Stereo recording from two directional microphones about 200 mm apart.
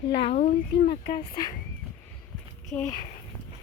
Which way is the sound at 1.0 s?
25° left (ahead or behind).